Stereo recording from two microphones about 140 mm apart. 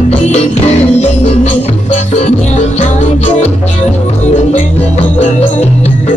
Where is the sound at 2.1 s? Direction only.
55° left (ahead or behind).